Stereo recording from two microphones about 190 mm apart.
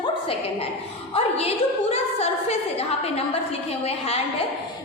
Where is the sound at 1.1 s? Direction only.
30° left (ahead or behind).